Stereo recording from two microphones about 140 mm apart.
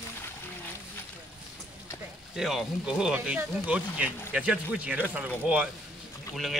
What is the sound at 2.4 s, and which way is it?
Speech, 5° right (ahead or behind).